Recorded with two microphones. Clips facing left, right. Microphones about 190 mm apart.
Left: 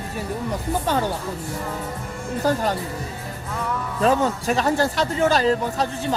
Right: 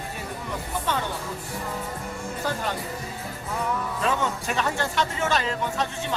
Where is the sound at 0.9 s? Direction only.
40° left (ahead or behind).